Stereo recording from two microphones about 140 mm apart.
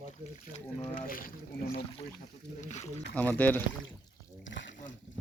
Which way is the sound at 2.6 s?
55° left (ahead or behind).